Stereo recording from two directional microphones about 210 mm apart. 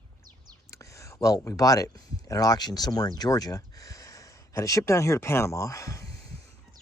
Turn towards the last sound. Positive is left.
turn(degrees=15)  # may be behind; listen again after turning